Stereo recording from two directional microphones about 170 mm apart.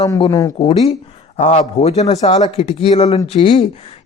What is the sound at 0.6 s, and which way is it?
Speech, 35° left (ahead or behind).